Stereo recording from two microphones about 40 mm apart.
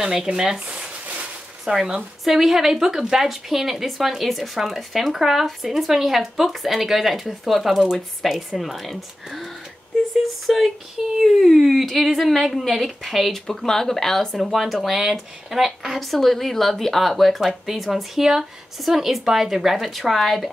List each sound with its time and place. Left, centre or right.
0.3 s speech: centre
0.7 s a sound: right
1.6 s a woman's voice: centre
13.6 s speech: centre
14.5 s a woman's voice: centre